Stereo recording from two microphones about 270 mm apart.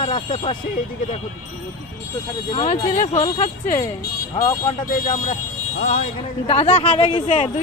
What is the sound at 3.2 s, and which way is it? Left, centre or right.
Speech, centre.